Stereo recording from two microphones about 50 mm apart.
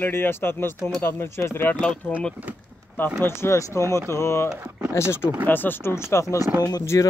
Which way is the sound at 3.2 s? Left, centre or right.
Left.